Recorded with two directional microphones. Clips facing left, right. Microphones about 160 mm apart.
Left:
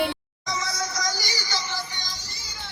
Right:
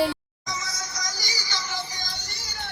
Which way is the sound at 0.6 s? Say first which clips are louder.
Left 6 dB; 60° left (ahead or behind).